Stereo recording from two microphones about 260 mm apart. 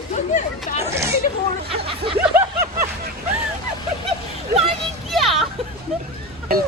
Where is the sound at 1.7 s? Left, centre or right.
Right.